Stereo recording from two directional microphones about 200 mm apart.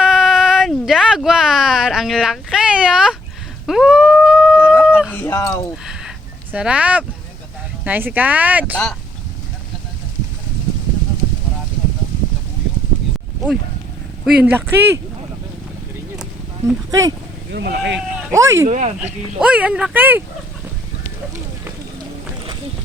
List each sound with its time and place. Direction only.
0.0 s a sound: 5° right (ahead or behind)
4.6 s a sound: 10° left (ahead or behind)
5.5 s a sound: 5° right (ahead or behind)
7.9 s speech: 10° right (ahead or behind)
14.4 s speech: 10° right (ahead or behind)
16.9 s speech: 15° right (ahead or behind)
17.5 s speech: 55° right (ahead or behind)
17.9 s speech: 5° right (ahead or behind)
18.7 s speech: 35° right (ahead or behind)
19.4 s speech: 5° right (ahead or behind)